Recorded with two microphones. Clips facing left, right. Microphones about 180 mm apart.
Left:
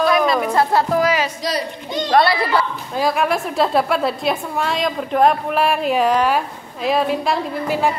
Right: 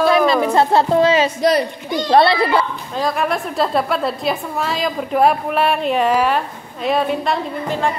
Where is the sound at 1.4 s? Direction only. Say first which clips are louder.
Right 8 dB; 55° right (ahead or behind).